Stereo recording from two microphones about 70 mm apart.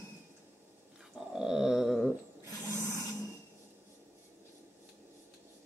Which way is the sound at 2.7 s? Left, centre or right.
Right.